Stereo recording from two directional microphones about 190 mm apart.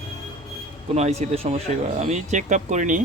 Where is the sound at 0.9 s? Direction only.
35° right (ahead or behind).